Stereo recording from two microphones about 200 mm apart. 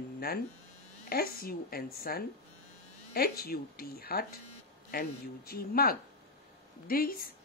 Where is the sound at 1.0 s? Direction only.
50° left (ahead or behind).